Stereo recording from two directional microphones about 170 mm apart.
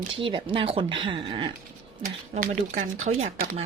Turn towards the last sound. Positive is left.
turn(degrees=-50)  # may be behind; listen again after turning